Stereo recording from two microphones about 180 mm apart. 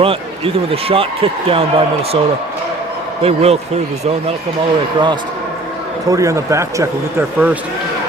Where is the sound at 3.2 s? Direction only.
35° right (ahead or behind).